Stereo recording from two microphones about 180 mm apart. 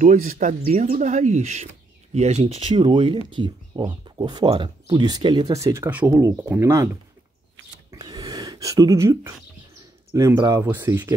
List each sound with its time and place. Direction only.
0.0 s speech: 45° right (ahead or behind); by 7.0 s 20° right (ahead or behind)
7.9 s a sound: 20° right (ahead or behind)
10.1 s speech: 20° right (ahead or behind)